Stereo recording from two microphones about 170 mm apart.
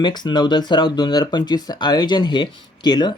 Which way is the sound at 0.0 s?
25° left (ahead or behind).